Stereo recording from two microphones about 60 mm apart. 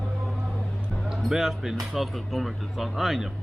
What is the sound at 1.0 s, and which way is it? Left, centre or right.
Speech, centre.